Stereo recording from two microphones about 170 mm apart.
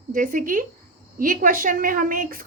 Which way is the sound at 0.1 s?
55° right (ahead or behind).